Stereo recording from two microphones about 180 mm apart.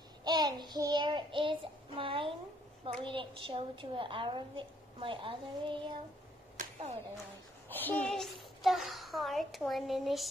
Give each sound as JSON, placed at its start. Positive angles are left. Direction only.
{"t": 0.2, "sound": "child singing", "side_deg": -25}
{"t": 3.0, "sound": "a woman's voice", "side_deg": -30}
{"t": 6.5, "sound": "a sound", "side_deg": -40}
{"t": 7.7, "sound": "a child's voice", "side_deg": 10}